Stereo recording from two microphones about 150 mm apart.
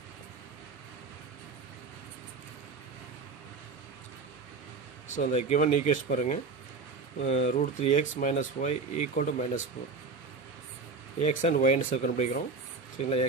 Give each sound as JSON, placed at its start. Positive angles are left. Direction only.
{"t": 5.0, "sound": "a sound", "side_deg": 55}
{"t": 5.3, "sound": "speech", "side_deg": 50}
{"t": 11.1, "sound": "speech", "side_deg": 50}